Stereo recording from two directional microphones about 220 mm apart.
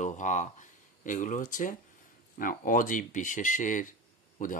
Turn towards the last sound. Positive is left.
turn(degrees=35)  # may be behind; listen again after turning